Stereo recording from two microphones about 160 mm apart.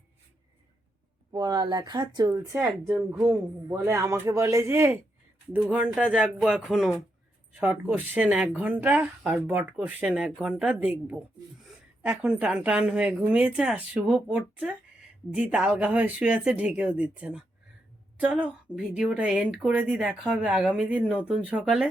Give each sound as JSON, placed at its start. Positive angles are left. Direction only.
{"t": 1.3, "sound": "speech", "side_deg": -25}
{"t": 2.3, "sound": "speech", "side_deg": -15}